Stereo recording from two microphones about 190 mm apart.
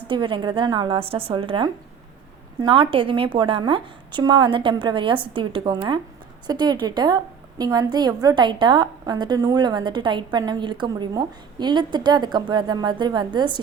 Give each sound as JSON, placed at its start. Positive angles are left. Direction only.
{"t": 0.1, "sound": "a woman's voice", "side_deg": -25}